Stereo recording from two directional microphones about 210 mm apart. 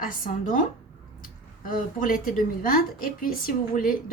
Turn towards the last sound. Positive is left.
turn(degrees=45)  # may be behind; listen again after turning